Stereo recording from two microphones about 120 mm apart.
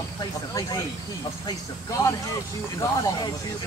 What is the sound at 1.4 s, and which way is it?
Speech, 25° left (ahead or behind).